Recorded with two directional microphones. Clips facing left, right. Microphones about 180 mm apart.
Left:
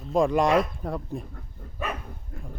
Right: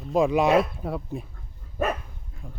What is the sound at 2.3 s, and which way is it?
Horse, 55° left (ahead or behind).